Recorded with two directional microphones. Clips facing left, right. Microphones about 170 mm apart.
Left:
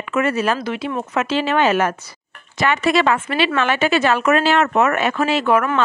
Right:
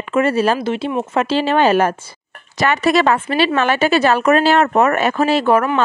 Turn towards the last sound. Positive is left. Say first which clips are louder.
# right 3 dB
turn(degrees=-35)  # may be behind; listen again after turning